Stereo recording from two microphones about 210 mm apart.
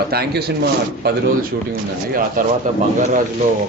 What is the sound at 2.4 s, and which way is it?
Speech, 40° right (ahead or behind).